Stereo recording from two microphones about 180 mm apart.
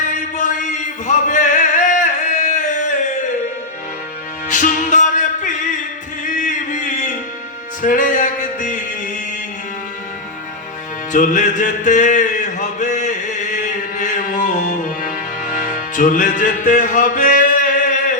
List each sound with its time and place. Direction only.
0.3 s music: 45° left (ahead or behind)
4.4 s music: 45° left (ahead or behind)
11.1 s mantra: 45° left (ahead or behind)
14.0 s music: 45° left (ahead or behind)